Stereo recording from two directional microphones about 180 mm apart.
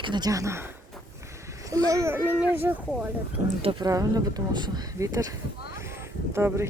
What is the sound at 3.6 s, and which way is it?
Speech, 30° right (ahead or behind).